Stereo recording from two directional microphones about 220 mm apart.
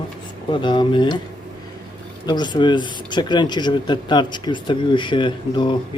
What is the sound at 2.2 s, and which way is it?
Speech, 20° left (ahead or behind).